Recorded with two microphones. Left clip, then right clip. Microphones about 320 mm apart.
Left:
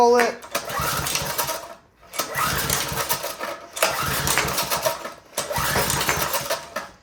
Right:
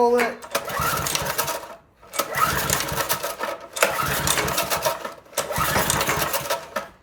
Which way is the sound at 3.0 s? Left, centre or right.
Centre.